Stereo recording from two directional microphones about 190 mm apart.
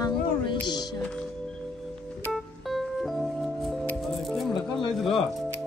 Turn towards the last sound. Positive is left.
turn(degrees=0)  # may be behind; listen again after turning